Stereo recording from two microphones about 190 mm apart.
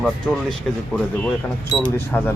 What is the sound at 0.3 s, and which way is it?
Speech, 5° left (ahead or behind).